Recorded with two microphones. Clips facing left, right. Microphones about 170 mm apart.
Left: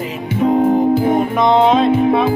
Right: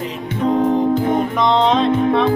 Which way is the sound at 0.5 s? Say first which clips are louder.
Left 2 dB; 50° left (ahead or behind).